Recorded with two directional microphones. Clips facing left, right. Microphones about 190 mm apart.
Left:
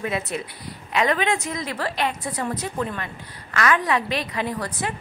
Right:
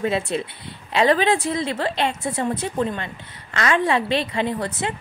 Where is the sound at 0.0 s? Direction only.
30° right (ahead or behind).